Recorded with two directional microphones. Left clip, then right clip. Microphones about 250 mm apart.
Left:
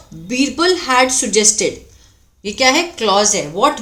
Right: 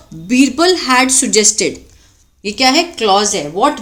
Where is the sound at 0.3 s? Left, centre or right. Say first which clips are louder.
Right 4 dB; right.